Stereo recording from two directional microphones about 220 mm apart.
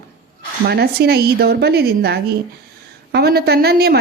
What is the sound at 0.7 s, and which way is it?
Speech, 45° right (ahead or behind).